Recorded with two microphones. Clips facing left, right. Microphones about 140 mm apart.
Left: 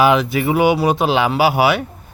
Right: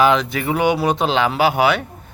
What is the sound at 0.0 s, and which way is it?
Speech, 5° left (ahead or behind).